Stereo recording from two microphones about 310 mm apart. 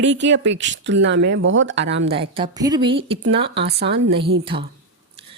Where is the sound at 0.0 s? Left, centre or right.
Right.